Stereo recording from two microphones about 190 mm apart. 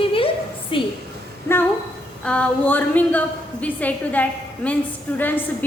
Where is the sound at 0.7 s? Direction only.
25° left (ahead or behind).